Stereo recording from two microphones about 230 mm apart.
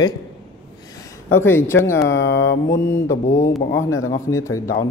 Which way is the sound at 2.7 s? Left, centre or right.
Centre.